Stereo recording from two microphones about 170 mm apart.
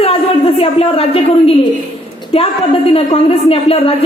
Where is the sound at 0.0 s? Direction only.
35° left (ahead or behind).